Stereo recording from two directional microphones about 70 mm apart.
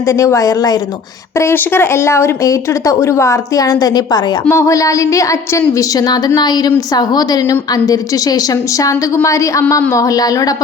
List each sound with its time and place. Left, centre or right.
0.0 s speech: left
1.4 s speech: left
4.4 s a woman's voice: left
9.1 s a woman's voice: left